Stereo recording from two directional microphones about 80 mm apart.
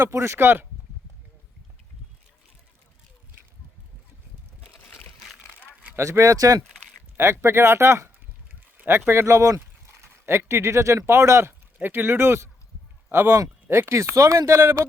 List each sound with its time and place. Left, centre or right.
0.0 s speech: right
6.0 s speech: right
7.2 s speech: right